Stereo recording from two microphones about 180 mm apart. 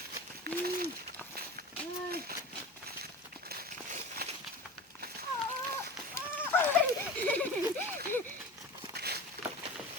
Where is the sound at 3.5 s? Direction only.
55° right (ahead or behind).